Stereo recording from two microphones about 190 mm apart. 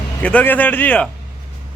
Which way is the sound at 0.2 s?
5° left (ahead or behind).